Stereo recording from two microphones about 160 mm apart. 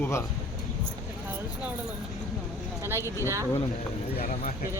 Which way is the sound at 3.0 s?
15° left (ahead or behind).